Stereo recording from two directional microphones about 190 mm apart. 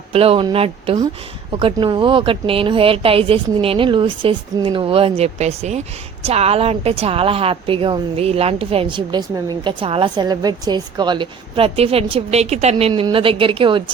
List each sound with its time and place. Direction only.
0.1 s a woman's voice: 30° right (ahead or behind)